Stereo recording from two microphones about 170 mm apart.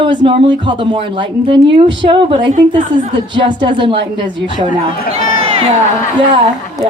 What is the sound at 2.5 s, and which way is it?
Speech, 50° right (ahead or behind).